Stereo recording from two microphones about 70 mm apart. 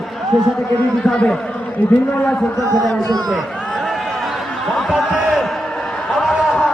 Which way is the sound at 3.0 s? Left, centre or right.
Right.